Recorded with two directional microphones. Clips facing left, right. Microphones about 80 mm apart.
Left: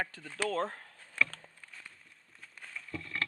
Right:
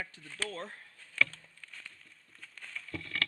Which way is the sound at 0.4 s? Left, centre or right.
Left.